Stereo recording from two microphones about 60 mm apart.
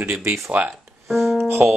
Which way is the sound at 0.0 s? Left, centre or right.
Right.